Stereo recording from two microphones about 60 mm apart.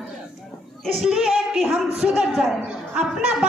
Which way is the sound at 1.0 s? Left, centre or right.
Centre.